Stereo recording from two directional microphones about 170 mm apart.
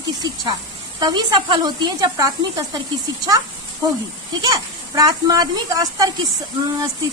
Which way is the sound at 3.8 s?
25° right (ahead or behind).